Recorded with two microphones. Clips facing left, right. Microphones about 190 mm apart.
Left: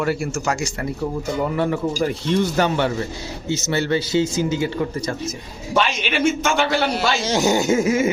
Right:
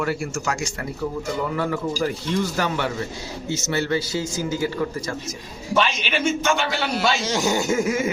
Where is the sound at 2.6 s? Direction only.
30° left (ahead or behind).